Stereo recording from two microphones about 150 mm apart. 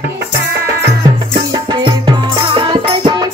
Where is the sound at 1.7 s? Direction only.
30° right (ahead or behind).